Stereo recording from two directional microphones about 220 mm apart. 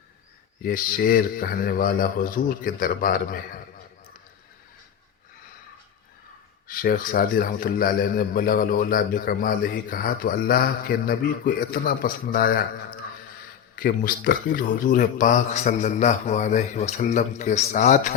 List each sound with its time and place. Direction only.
0.6 s a man's voice: 40° left (ahead or behind)
6.7 s a man's voice: 40° left (ahead or behind)
13.7 s a man's voice: 40° left (ahead or behind)